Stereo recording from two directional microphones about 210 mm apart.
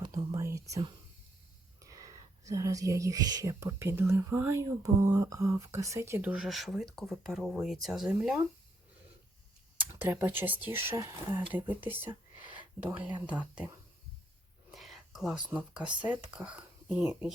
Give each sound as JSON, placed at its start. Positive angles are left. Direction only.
{"t": 0.0, "sound": "whispering", "side_deg": -15}
{"t": 0.3, "sound": "speech", "side_deg": -15}
{"t": 9.7, "sound": "speech", "side_deg": -10}
{"t": 14.7, "sound": "whispering", "side_deg": 0}
{"t": 15.4, "sound": "speech", "side_deg": -5}